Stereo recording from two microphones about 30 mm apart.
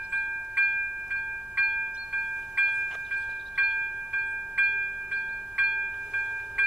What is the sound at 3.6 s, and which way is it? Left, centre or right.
Chime, right.